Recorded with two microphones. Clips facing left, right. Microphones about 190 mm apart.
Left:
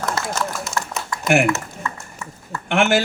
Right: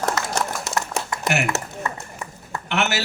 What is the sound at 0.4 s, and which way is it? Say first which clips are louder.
Run: even; 70° right (ahead or behind).